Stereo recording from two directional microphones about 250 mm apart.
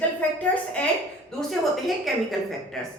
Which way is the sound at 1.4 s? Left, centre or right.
Centre.